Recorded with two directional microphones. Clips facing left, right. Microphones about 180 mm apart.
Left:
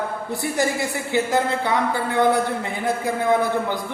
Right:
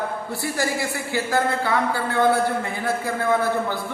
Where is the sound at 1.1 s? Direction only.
20° left (ahead or behind).